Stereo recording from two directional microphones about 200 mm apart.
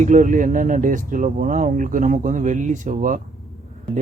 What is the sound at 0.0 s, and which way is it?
Speech, 40° right (ahead or behind).